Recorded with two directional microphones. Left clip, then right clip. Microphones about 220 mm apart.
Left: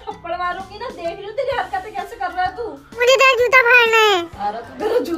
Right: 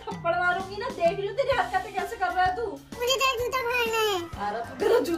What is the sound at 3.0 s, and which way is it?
Speech, 10° left (ahead or behind).